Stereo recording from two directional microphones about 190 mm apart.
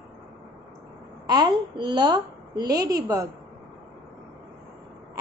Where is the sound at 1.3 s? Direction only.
20° right (ahead or behind).